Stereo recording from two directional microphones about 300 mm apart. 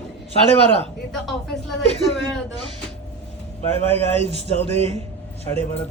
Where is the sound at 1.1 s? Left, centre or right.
Centre.